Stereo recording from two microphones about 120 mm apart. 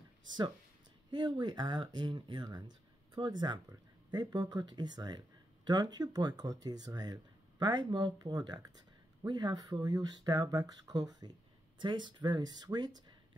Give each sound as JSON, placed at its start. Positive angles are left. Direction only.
{"t": 1.1, "sound": "speech", "side_deg": -35}